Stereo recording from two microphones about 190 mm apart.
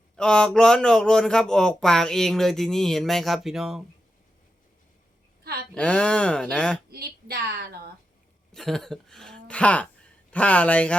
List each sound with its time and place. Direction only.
0.2 s speech: 5° left (ahead or behind)
5.7 s speech: 5° left (ahead or behind)
6.9 s a woman's voice: 55° right (ahead or behind)
8.5 s speech: centre (ahead or behind)